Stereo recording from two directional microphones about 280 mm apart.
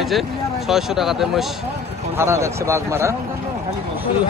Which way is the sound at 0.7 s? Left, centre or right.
Centre.